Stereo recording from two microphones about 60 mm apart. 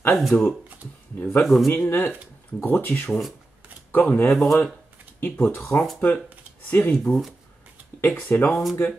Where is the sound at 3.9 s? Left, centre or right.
Left.